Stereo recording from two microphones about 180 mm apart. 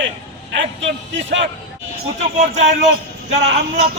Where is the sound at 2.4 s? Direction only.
40° right (ahead or behind).